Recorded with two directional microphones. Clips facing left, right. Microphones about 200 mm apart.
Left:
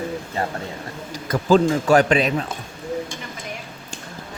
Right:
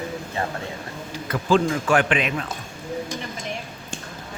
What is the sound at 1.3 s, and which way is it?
Speech, 40° left (ahead or behind).